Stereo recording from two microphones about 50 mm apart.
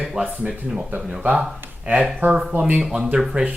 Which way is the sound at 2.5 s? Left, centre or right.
Right.